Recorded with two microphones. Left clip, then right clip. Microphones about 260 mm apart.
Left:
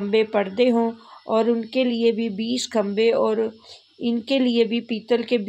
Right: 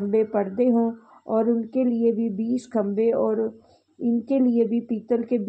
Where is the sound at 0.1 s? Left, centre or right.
Left.